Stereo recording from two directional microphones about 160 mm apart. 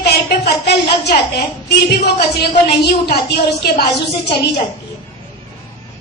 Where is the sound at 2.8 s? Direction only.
90° left.